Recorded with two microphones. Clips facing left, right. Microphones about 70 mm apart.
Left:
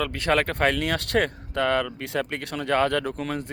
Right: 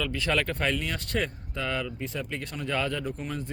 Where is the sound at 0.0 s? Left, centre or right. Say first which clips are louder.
Left 5 dB; left.